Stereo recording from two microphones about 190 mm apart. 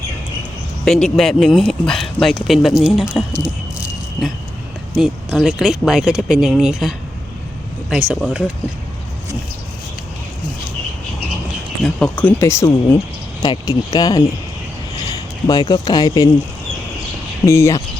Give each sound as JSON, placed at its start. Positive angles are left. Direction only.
{"t": 0.9, "sound": "speech", "side_deg": 0}
{"t": 4.9, "sound": "speech", "side_deg": 0}
{"t": 11.8, "sound": "speech", "side_deg": 5}
{"t": 15.4, "sound": "speech", "side_deg": 20}
{"t": 17.4, "sound": "speech", "side_deg": 15}